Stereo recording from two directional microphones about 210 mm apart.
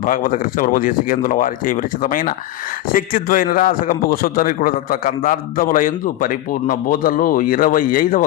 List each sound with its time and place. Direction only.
0.0 s a man's voice: 40° left (ahead or behind)